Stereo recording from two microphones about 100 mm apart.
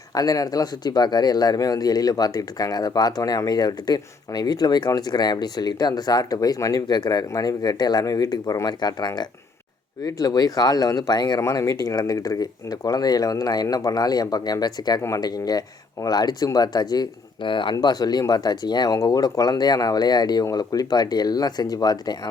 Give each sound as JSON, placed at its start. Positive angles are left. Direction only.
{"t": 0.1, "sound": "speech", "side_deg": 40}
{"t": 11.3, "sound": "speech", "side_deg": 30}